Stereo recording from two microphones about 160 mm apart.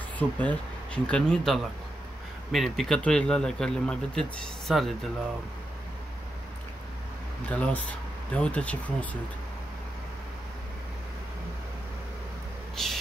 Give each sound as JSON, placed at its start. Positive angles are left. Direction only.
{"t": 0.2, "sound": "speech", "side_deg": 10}
{"t": 7.4, "sound": "speech", "side_deg": 10}
{"t": 12.7, "sound": "a sound", "side_deg": 0}